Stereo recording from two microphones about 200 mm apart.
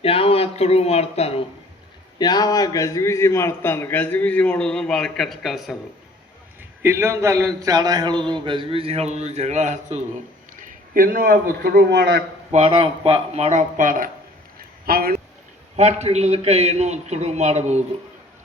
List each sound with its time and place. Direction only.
0.0 s speech: 30° left (ahead or behind)
2.1 s a man's voice: 20° left (ahead or behind); by 5.7 s centre (ahead or behind)
6.8 s a man's voice: 15° right (ahead or behind); by 10.0 s 35° right (ahead or behind)
10.9 s a man's voice: 45° right (ahead or behind)
12.5 s a man's voice: 30° right (ahead or behind); by 15.1 s 50° right (ahead or behind)
15.7 s a man's voice: 35° right (ahead or behind)